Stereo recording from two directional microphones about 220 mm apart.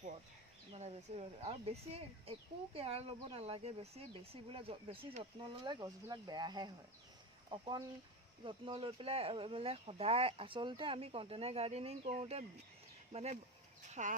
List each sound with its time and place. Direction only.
0.7 s speech: 30° right (ahead or behind)